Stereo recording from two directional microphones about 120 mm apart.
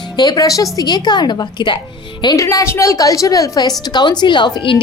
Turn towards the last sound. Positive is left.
turn(degrees=40)  # may be behind; listen again after turning